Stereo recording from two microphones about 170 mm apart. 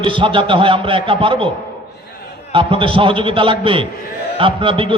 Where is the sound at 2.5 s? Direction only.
30° right (ahead or behind).